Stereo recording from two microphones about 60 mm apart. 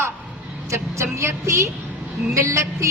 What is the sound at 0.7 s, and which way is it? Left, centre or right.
Speech, right.